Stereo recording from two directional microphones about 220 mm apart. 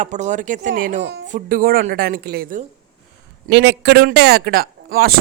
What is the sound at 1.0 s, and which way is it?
Speech, 50° right (ahead or behind).